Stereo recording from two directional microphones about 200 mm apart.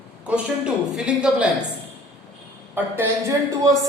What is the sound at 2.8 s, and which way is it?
Speech, 10° right (ahead or behind).